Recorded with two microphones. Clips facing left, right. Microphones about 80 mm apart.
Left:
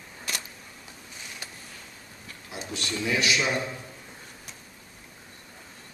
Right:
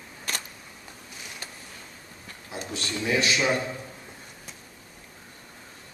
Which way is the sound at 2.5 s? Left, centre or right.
Right.